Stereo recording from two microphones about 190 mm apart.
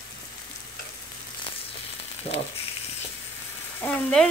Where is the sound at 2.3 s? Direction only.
35° left (ahead or behind).